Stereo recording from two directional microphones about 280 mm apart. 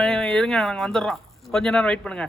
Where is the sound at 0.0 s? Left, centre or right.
Centre.